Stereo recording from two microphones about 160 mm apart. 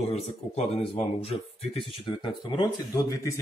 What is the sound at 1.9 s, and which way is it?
Speech, 30° left (ahead or behind).